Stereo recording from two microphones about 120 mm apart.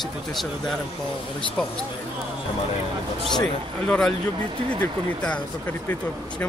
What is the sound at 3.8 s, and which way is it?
Speech, 5° left (ahead or behind).